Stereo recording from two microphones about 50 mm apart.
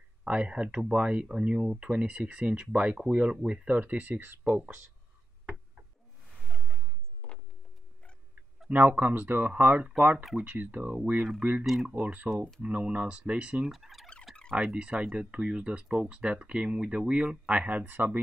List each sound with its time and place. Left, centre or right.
0.2 s speech: right
8.7 s speech: right
11.6 s speech: centre
12.0 s speech: right
13.7 s turkey: centre
14.3 s a sound: centre
14.7 s speech: right